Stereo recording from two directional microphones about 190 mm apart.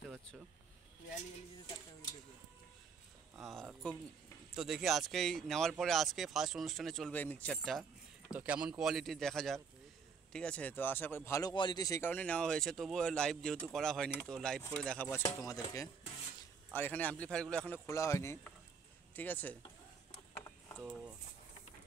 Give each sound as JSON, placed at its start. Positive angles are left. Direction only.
{"t": 3.4, "sound": "speech", "side_deg": 0}
{"t": 17.8, "sound": "speech", "side_deg": 15}
{"t": 20.4, "sound": "a sound", "side_deg": 15}